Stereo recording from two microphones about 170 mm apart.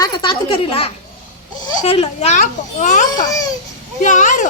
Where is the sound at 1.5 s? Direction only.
25° left (ahead or behind).